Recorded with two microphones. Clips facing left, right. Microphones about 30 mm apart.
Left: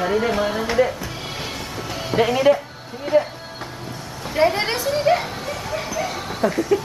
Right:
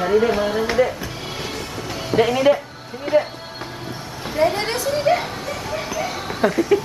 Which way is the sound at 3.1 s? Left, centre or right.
Centre.